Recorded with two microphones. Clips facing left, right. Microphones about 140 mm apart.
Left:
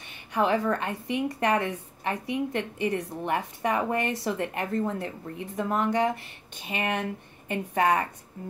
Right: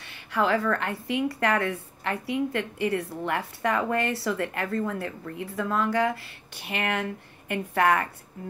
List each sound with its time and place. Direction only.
0.3 s a woman's voice: 20° left (ahead or behind)